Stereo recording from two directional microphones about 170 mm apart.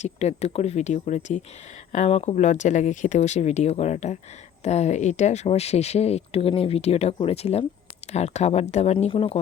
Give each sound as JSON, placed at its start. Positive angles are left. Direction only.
{"t": 0.0, "sound": "speech", "side_deg": 40}